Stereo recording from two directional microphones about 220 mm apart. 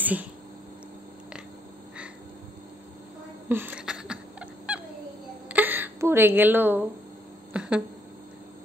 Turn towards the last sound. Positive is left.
turn(degrees=-5)  # may be behind; listen again after turning